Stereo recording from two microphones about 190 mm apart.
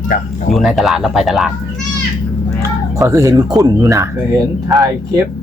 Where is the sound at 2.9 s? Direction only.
15° right (ahead or behind).